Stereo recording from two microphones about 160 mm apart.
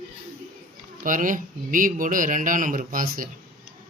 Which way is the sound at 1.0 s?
55° right (ahead or behind).